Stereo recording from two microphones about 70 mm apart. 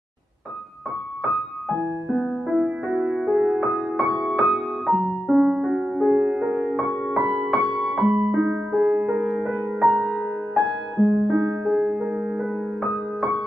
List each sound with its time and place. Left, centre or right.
1.2 s music: centre
2.5 s music: centre
3.7 s music: centre
9.5 s music: centre
11.2 s music: centre